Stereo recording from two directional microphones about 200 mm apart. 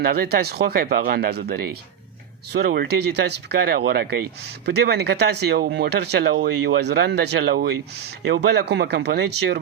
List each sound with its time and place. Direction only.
0.0 s speech: 50° right (ahead or behind)